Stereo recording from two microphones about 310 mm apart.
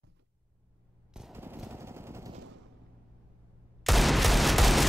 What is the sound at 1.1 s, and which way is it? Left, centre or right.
Machine gun, centre.